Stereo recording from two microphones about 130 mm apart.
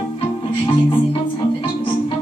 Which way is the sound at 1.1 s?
45° left (ahead or behind).